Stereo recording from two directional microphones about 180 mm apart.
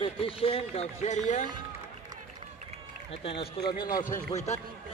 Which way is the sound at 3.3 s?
65° left (ahead or behind).